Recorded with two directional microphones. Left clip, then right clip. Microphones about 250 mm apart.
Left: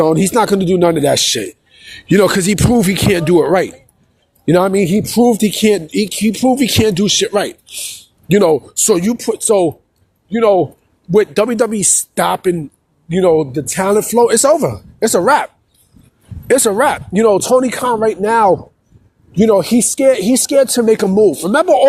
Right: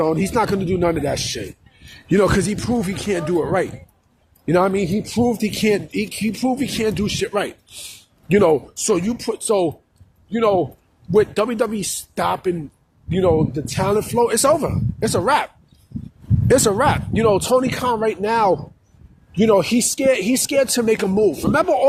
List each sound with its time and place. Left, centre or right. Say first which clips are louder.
0.0 s speech: left 7 dB; left
16.5 s speech: left 4 dB; left